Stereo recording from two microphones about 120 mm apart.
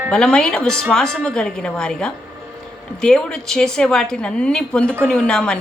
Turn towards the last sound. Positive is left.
turn(degrees=5)  # may be behind; listen again after turning